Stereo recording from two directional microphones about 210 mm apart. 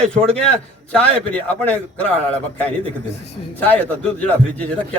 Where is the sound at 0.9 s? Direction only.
5° left (ahead or behind).